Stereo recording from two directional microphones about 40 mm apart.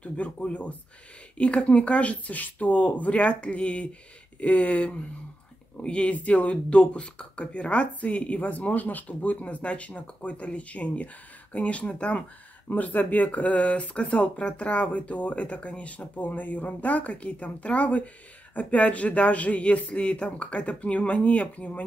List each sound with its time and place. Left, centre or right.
0.0 s speech: left
8.4 s speech: left
12.7 s speech: left